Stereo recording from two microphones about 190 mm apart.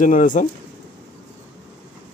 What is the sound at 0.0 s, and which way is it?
Speech, 40° left (ahead or behind).